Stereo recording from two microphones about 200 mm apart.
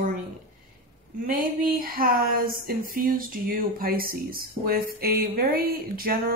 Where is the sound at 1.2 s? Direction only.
45° right (ahead or behind).